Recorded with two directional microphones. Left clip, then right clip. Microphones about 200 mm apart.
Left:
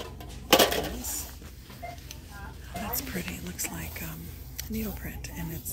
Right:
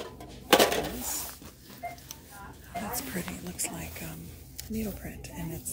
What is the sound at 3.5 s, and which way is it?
Speech, centre (ahead or behind).